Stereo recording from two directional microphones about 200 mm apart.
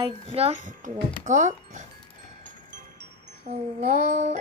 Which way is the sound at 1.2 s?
40° right (ahead or behind).